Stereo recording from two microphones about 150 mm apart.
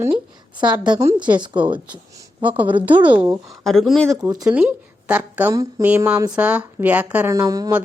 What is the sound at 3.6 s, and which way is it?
A woman's voice, centre (ahead or behind).